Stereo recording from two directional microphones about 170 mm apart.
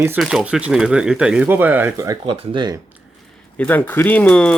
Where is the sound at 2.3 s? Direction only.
30° right (ahead or behind).